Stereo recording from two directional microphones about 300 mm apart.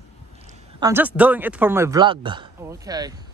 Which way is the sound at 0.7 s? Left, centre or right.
Centre.